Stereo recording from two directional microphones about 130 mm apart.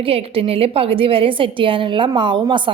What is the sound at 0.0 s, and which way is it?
A woman's voice, 45° right (ahead or behind).